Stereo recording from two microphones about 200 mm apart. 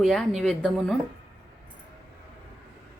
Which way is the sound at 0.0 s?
Centre (ahead or behind).